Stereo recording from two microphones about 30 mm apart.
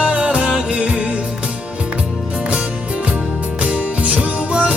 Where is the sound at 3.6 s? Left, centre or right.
Right.